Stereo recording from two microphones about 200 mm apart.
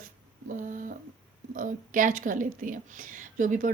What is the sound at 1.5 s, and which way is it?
Speech, 40° right (ahead or behind).